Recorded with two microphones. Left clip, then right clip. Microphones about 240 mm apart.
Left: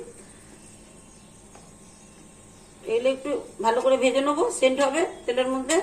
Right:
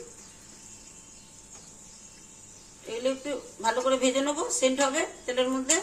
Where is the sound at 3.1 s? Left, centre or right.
Right.